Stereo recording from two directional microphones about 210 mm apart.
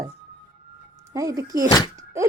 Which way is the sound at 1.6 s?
25° left (ahead or behind).